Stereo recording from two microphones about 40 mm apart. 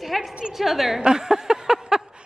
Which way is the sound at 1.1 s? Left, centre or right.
Centre.